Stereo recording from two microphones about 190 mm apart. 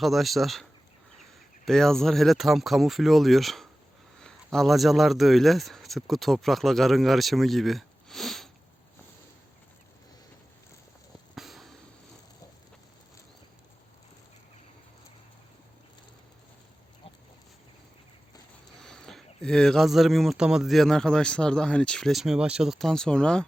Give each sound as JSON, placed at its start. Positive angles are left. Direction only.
{"t": 0.0, "sound": "speech", "side_deg": 0}
{"t": 11.3, "sound": "a sound", "side_deg": 0}
{"t": 18.8, "sound": "speech", "side_deg": 5}